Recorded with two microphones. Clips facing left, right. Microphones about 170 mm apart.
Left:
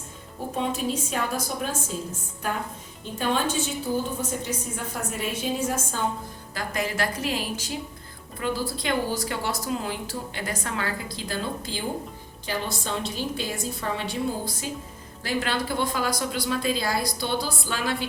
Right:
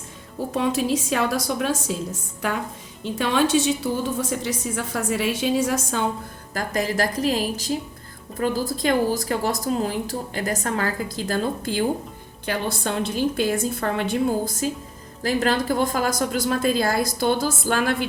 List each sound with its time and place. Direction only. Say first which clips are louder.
0.5 s a woman's voice: right 5 dB; 90° right
3.0 s a woman's voice: right 5 dB; 85° right
6.5 s a woman's voice: right 5 dB; 45° right (ahead or behind)